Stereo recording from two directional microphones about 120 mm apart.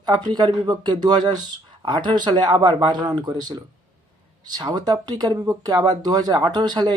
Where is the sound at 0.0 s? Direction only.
35° right (ahead or behind).